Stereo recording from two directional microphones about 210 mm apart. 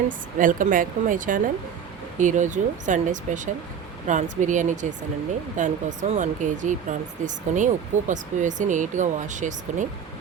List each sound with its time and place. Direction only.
0.3 s speech: 40° right (ahead or behind)